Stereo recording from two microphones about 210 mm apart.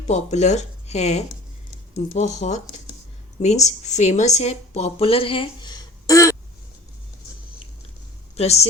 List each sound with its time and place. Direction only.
0.1 s speech: 35° left (ahead or behind); by 6.3 s 15° left (ahead or behind)
8.4 s speech: 30° left (ahead or behind)